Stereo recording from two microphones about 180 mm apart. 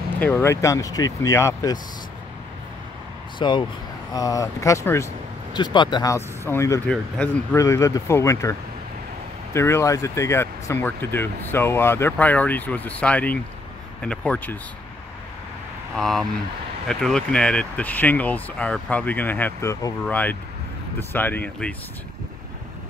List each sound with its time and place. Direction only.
0.1 s speech: 10° left (ahead or behind)
3.3 s speech: 25° left (ahead or behind)
6.9 s speech: 5° left (ahead or behind)
7.5 s speech: 15° left (ahead or behind)
16.0 s speech: centre (ahead or behind)